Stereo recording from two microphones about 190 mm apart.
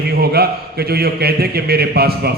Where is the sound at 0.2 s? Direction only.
55° right (ahead or behind).